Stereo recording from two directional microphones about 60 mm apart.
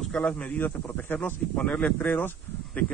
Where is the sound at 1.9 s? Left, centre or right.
Left.